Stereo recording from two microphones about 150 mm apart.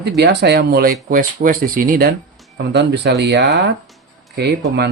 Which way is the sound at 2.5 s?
90° right.